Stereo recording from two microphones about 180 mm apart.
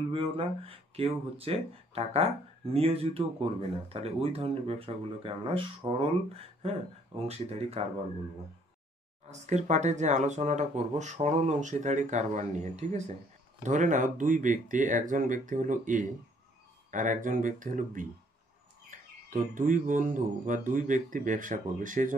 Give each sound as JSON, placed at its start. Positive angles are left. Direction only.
{"t": 0.1, "sound": "speech", "side_deg": -30}
{"t": 9.3, "sound": "speech", "side_deg": -40}